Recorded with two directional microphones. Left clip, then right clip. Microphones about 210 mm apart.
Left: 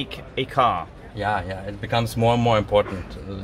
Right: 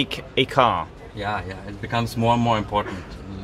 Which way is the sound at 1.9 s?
40° left (ahead or behind).